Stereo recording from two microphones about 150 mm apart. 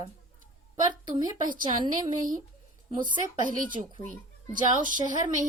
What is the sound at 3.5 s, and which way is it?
A child's voice, 60° right (ahead or behind).